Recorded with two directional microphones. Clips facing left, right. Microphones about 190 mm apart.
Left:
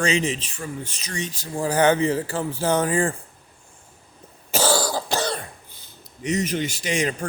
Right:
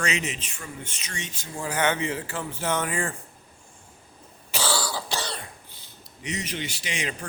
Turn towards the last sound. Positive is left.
turn(degrees=45)  # may be behind; listen again after turning